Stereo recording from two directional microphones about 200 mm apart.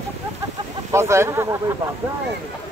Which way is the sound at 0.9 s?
15° right (ahead or behind).